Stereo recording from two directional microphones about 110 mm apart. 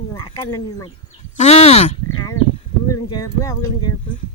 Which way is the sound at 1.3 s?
85° left.